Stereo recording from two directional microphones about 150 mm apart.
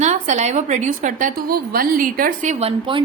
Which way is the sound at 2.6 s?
35° right (ahead or behind).